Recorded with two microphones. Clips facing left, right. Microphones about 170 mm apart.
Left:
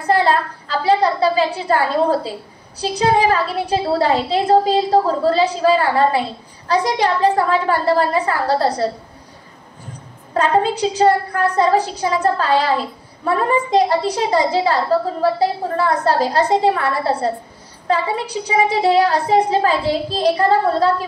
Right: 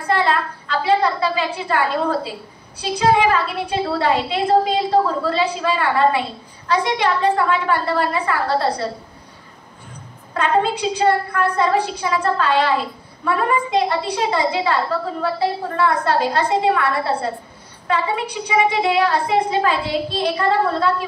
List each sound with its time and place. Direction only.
0.0 s a sound: 35° left (ahead or behind)
2.8 s a woman's voice: 40° left (ahead or behind)
10.3 s a woman's voice: 40° left (ahead or behind)